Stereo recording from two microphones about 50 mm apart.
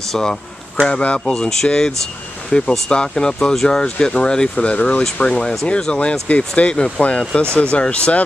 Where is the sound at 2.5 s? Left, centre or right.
Left.